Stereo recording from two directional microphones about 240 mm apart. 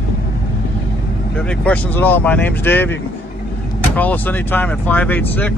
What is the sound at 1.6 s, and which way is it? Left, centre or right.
Speech, centre.